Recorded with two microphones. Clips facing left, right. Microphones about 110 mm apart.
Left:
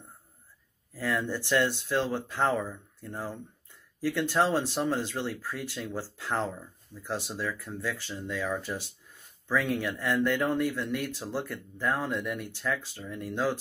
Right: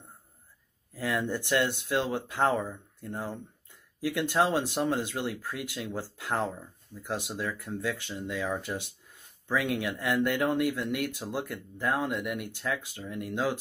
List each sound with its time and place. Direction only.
0.9 s speech: 15° right (ahead or behind)